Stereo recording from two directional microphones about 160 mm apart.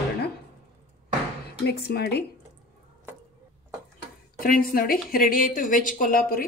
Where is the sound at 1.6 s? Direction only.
90° left.